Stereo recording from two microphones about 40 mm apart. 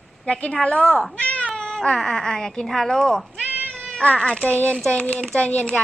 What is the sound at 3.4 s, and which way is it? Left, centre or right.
Cat, right.